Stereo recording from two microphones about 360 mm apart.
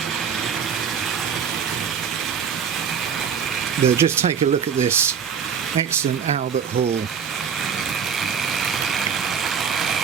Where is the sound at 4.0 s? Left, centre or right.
Centre.